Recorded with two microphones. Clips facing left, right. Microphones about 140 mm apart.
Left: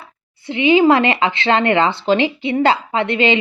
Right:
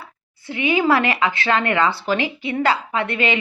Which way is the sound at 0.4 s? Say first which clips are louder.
Left 6 dB; 20° left (ahead or behind).